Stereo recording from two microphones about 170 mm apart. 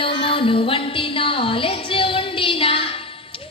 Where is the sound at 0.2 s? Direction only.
30° left (ahead or behind).